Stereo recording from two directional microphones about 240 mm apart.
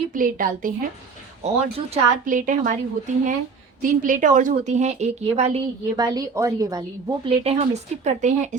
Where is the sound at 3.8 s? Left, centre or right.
Right.